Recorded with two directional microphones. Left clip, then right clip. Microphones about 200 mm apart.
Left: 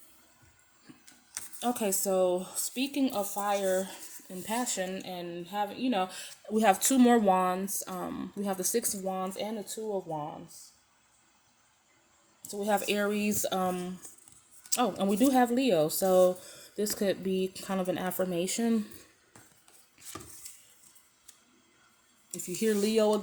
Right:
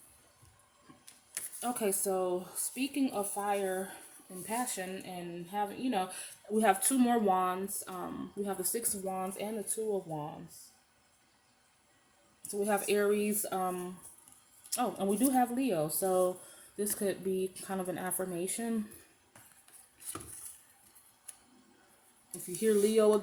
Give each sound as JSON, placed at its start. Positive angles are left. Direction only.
{"t": 1.5, "sound": "speech", "side_deg": 45}
{"t": 8.8, "sound": "speech", "side_deg": 30}
{"t": 12.6, "sound": "speech", "side_deg": 40}
{"t": 22.3, "sound": "speech", "side_deg": 45}